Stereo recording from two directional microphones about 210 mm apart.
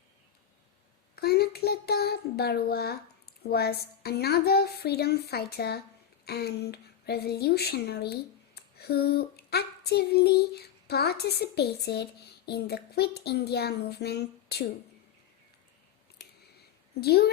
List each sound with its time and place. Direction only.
1.1 s a child's voice: 50° left (ahead or behind)
17.0 s speech: 50° left (ahead or behind)